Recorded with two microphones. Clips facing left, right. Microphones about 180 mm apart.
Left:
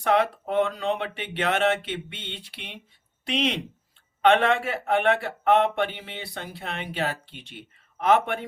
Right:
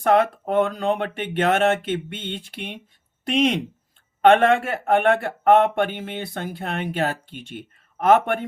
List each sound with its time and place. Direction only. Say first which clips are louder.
0.0 s speech: right 4 dB; 50° right (ahead or behind)